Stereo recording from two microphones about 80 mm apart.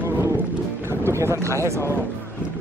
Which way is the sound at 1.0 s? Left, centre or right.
Right.